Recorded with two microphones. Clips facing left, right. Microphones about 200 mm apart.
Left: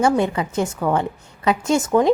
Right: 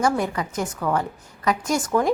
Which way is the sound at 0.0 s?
25° left (ahead or behind).